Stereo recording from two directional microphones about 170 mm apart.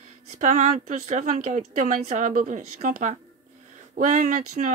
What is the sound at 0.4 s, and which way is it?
Speech, 50° right (ahead or behind).